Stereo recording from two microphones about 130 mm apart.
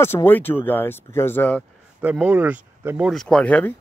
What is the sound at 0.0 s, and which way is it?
Speech, 20° left (ahead or behind).